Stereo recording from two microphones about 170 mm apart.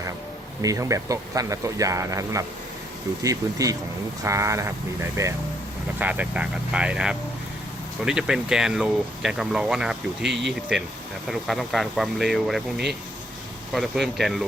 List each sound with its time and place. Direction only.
0.6 s speech: 20° right (ahead or behind); by 14.4 s centre (ahead or behind)